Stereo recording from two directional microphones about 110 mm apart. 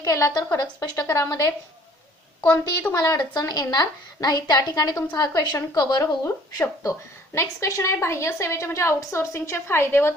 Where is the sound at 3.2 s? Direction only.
35° left (ahead or behind).